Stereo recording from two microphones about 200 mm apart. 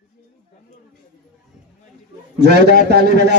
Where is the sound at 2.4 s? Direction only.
60° right (ahead or behind).